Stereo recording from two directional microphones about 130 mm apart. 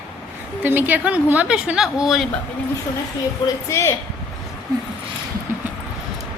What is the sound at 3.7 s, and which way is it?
Speech, 20° left (ahead or behind).